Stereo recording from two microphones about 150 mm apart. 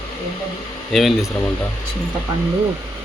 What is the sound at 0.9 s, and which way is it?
Speech, centre (ahead or behind).